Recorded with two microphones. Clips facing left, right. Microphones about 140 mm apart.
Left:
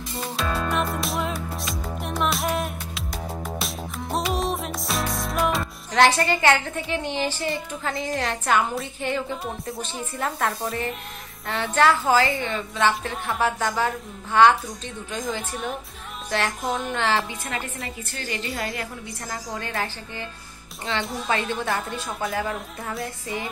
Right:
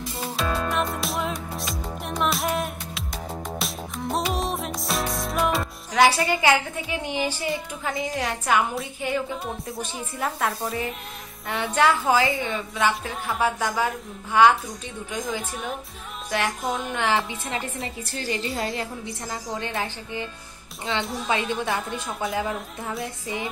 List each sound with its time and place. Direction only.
0.1 s music: centre (ahead or behind)
7.8 s a woman's voice: 10° right (ahead or behind)
11.4 s a woman's voice: 15° right (ahead or behind)
16.3 s music: 10° right (ahead or behind)
16.6 s speech: centre (ahead or behind)
16.9 s a woman's voice: 15° right (ahead or behind)
17.5 s a woman's voice: 30° right (ahead or behind)
21.0 s speech: centre (ahead or behind)
21.3 s a woman's voice: 15° right (ahead or behind)
21.6 s speech: centre (ahead or behind)